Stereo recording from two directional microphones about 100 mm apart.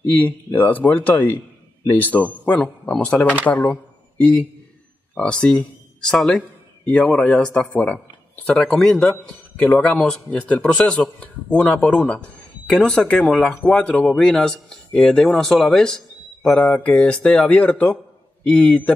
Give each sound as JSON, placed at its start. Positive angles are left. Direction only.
{"t": 0.1, "sound": "speech", "side_deg": 20}